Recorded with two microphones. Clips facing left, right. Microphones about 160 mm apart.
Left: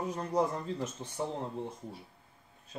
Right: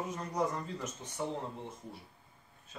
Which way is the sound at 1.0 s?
30° left (ahead or behind).